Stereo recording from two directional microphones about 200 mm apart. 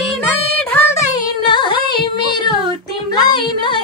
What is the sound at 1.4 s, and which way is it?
Singing, 25° left (ahead or behind).